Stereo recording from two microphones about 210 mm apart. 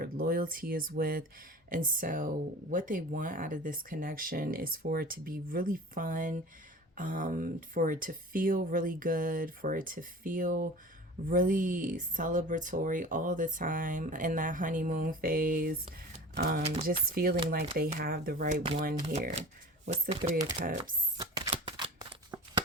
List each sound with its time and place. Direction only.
0.0 s speech: 45° right (ahead or behind)
21.2 s a sound: 20° right (ahead or behind)
21.5 s shuffling cards: 25° right (ahead or behind)